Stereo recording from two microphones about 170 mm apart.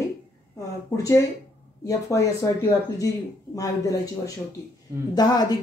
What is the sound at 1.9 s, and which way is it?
Speech, 20° left (ahead or behind).